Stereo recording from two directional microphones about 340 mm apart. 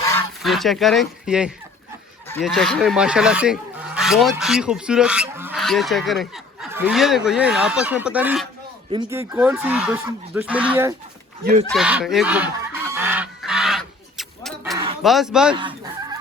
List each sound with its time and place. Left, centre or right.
0.1 s speech: centre
12.9 s goose: centre
15.0 s speech: centre